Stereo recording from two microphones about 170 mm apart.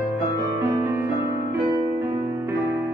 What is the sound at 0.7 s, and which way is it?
Music, 15° right (ahead or behind).